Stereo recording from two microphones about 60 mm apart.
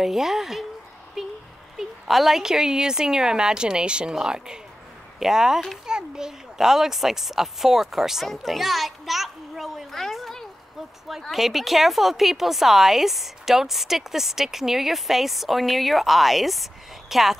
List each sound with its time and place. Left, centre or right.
0.0 s a woman's voice: centre
8.3 s a sound: centre
11.2 s a woman's voice: centre